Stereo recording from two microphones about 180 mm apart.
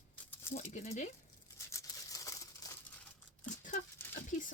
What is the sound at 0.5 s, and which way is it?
Speech, 40° left (ahead or behind).